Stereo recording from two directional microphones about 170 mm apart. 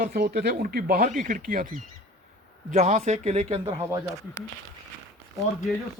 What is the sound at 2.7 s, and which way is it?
Speech, 45° right (ahead or behind).